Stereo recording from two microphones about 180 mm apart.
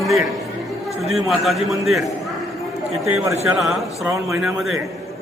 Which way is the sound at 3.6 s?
Centre (ahead or behind).